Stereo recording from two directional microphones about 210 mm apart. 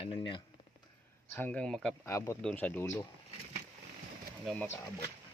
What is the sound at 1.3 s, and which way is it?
Speech, 5° left (ahead or behind).